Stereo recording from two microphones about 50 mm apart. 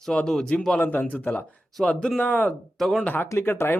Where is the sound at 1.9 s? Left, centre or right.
Centre.